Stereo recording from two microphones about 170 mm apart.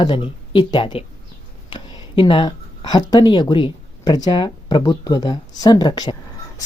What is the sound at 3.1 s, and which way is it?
Speech, 25° left (ahead or behind).